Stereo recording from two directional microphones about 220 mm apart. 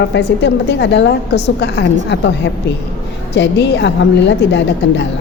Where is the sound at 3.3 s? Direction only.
50° left (ahead or behind).